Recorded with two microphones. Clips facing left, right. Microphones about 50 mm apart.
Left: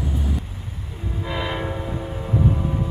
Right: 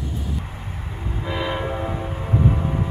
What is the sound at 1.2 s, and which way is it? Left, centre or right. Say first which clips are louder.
Train: right 1 dB; centre.